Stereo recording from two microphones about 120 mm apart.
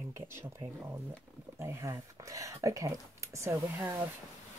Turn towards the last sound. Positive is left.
turn(degrees=-25)  # may be behind; listen again after turning